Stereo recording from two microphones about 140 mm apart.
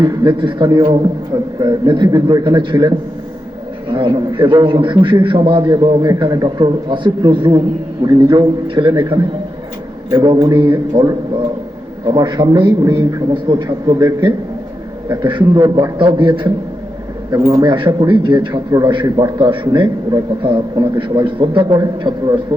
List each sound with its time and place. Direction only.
0.0 s a man's voice: 35° right (ahead or behind)
8.9 s a man's voice: 25° right (ahead or behind)
10.1 s a man's voice: 35° right (ahead or behind)